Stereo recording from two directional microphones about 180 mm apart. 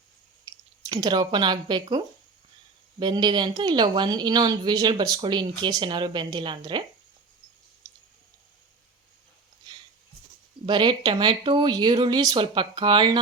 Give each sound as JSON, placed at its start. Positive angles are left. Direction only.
{"t": 0.4, "sound": "speech", "side_deg": -20}
{"t": 3.0, "sound": "a woman's voice", "side_deg": -25}
{"t": 10.7, "sound": "a woman's voice", "side_deg": -25}